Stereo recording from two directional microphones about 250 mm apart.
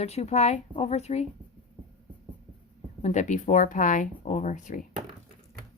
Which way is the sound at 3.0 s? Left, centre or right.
Left.